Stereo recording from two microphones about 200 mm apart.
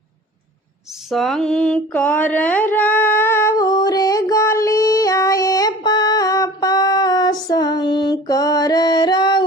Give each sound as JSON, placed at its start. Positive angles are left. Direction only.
{"t": 1.1, "sound": "mantra", "side_deg": 0}